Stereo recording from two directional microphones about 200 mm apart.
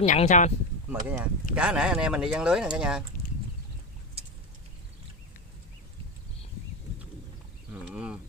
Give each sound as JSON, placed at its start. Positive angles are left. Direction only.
{"t": 0.0, "sound": "speech", "side_deg": 35}
{"t": 0.8, "sound": "speech", "side_deg": -10}
{"t": 7.7, "sound": "a sound", "side_deg": -5}